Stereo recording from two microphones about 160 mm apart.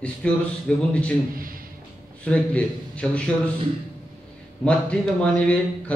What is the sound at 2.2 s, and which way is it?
A man's voice, 10° left (ahead or behind).